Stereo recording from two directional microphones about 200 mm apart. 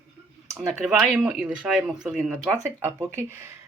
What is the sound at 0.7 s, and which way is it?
Speech, centre (ahead or behind).